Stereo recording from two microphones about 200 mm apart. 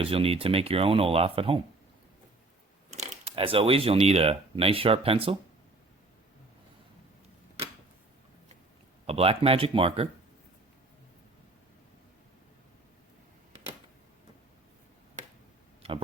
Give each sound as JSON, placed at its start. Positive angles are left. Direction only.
{"t": 0.0, "sound": "speech", "side_deg": -30}
{"t": 2.9, "sound": "speech", "side_deg": -35}
{"t": 9.0, "sound": "speech", "side_deg": -30}
{"t": 15.8, "sound": "a sound", "side_deg": -30}